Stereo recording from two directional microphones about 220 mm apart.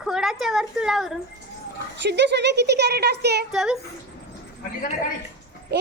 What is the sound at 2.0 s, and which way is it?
A child's voice, 50° right (ahead or behind).